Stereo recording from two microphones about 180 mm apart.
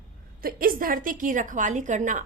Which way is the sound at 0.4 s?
50° right (ahead or behind).